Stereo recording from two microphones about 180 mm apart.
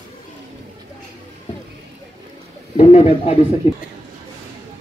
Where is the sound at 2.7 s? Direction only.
40° left (ahead or behind).